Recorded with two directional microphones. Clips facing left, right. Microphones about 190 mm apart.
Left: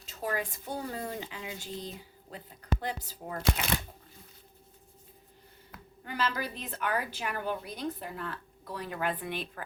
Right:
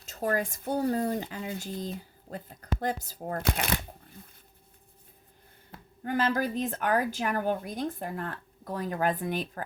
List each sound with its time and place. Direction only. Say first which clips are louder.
0.0 s speech: right 5 dB; 45° right (ahead or behind)
5.7 s a sound: right 2 dB; 30° right (ahead or behind)
6.1 s speech: right 6 dB; 45° right (ahead or behind)